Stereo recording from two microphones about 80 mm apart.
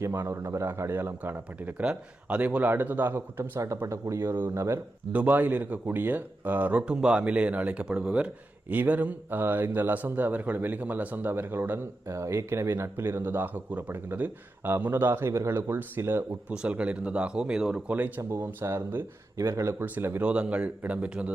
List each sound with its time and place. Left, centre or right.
0.0 s a man's voice: right
1.8 s speech: centre
3.2 s a man's voice: right
5.1 s speech: right
12.0 s speech: right
16.5 s speech: centre
17.8 s speech: centre
18.3 s a man's voice: right
20.2 s speech: centre